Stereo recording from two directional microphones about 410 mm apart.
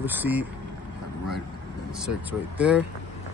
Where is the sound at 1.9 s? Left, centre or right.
Centre.